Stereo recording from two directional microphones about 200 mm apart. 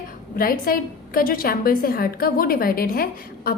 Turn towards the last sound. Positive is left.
turn(degrees=50)  # may be behind; listen again after turning